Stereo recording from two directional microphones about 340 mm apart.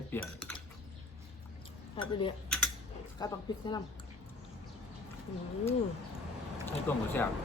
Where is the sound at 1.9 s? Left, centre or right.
Centre.